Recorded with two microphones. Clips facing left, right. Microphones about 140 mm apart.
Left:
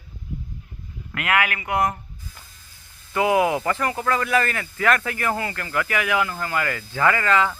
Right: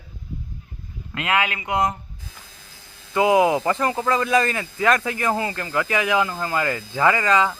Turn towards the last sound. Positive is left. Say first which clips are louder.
# right 1 dB
turn(degrees=-15)  # may be behind; listen again after turning